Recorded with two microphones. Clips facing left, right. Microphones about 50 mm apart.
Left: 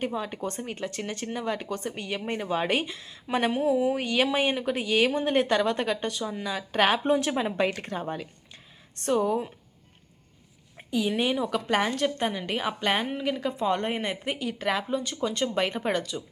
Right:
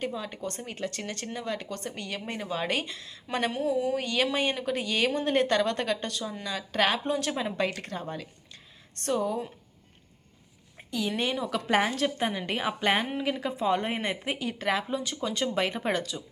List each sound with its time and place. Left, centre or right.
0.4 s a woman's voice: centre
10.8 s a woman's voice: centre
11.7 s a woman's voice: centre